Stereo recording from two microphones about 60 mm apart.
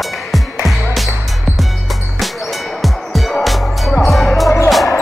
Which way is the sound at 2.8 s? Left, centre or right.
Centre.